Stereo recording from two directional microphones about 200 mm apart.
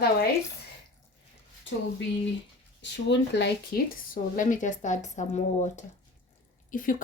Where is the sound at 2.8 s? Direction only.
60° left (ahead or behind).